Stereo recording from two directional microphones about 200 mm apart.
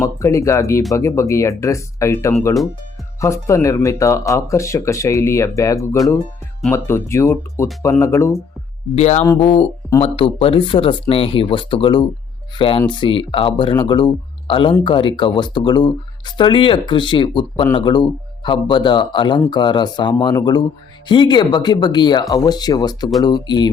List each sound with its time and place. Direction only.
0.0 s speech: 15° left (ahead or behind)
9.0 s speech: 35° left (ahead or behind)